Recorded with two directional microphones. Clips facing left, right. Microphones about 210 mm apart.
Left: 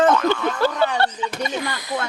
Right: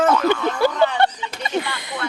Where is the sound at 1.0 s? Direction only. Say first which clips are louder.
Right 3 dB; 20° right (ahead or behind).